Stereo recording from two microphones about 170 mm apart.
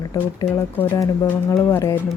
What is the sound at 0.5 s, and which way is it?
Speech, 15° left (ahead or behind).